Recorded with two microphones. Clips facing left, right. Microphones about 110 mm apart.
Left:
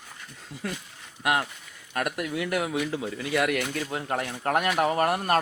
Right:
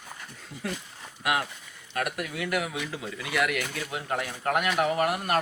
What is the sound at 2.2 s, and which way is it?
Speech, 30° left (ahead or behind).